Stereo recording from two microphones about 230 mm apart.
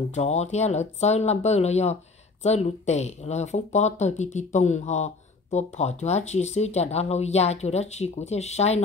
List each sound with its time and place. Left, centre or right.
0.1 s speech: left